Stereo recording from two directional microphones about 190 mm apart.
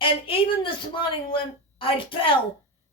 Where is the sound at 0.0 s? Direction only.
30° left (ahead or behind).